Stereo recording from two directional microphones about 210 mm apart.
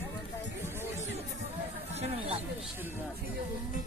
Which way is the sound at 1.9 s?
30° right (ahead or behind).